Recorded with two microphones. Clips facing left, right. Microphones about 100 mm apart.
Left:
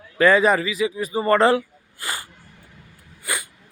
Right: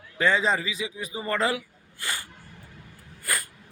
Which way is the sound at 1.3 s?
40° left (ahead or behind).